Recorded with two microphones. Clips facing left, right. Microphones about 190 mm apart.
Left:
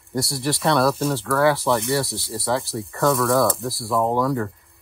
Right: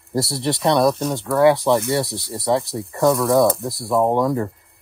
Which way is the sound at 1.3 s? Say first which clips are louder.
Right 5 dB; 25° right (ahead or behind).